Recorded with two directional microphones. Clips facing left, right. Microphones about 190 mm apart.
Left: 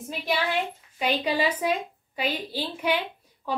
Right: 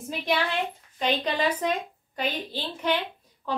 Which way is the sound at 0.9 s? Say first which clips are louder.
Left 1 dB; 10° left (ahead or behind).